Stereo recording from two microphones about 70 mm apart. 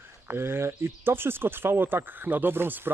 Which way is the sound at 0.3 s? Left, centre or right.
Right.